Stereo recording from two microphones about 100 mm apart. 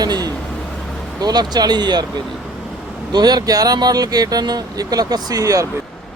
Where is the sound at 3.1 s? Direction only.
45° right (ahead or behind).